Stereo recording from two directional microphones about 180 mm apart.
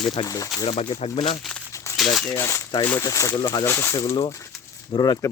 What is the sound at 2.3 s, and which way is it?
Speech, 15° left (ahead or behind).